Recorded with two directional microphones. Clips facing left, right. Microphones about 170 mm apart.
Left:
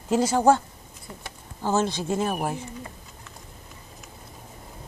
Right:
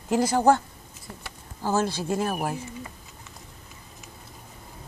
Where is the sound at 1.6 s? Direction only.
10° right (ahead or behind).